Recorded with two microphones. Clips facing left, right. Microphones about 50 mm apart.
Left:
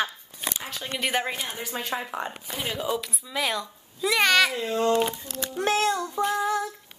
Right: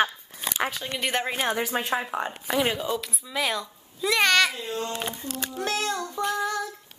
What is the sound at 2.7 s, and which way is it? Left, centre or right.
Speech, centre.